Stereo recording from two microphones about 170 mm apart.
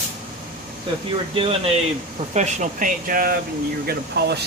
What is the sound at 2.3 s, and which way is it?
Speech, 45° right (ahead or behind).